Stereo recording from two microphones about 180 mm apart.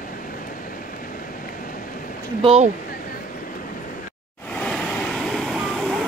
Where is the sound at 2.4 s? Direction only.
35° right (ahead or behind).